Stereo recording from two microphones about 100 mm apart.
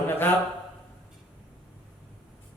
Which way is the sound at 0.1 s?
20° left (ahead or behind).